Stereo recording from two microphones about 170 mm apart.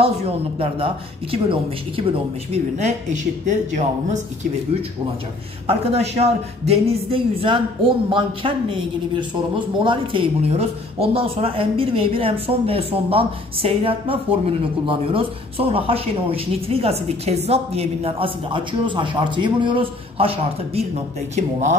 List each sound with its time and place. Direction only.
0.0 s speech: 35° right (ahead or behind)
2.5 s speech: 40° right (ahead or behind)
5.7 s speech: 35° right (ahead or behind)
21.4 s speech: 45° right (ahead or behind)